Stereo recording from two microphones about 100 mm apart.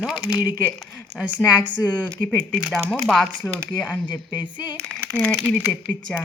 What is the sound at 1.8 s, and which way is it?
Speech, 15° left (ahead or behind).